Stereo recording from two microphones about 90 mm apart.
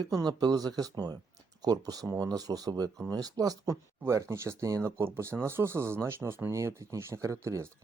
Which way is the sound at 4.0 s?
30° right (ahead or behind).